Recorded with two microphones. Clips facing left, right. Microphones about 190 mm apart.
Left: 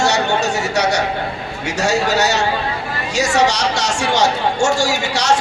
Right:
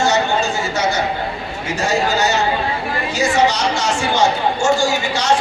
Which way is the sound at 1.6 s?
75° left (ahead or behind).